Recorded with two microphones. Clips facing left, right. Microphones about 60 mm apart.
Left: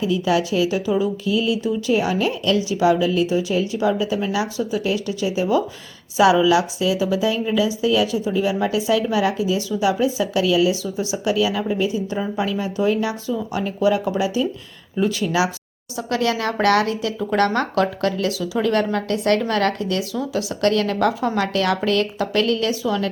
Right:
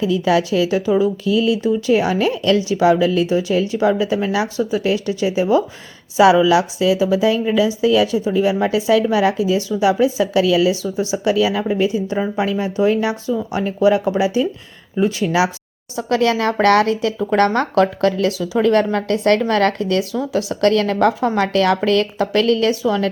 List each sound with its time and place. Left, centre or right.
0.0 s a woman's voice: right
10.8 s a woman's voice: right
12.2 s a woman's voice: right